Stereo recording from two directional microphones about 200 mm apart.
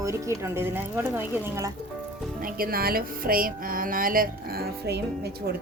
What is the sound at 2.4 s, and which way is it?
Speech, 50° right (ahead or behind).